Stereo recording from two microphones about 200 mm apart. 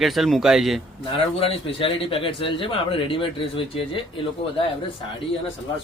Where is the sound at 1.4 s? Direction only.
30° left (ahead or behind).